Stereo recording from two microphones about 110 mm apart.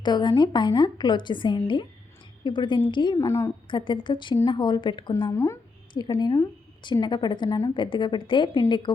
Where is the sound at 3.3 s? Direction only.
25° left (ahead or behind).